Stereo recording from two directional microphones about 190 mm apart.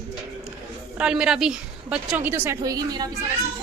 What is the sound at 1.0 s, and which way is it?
A woman's voice, 5° right (ahead or behind).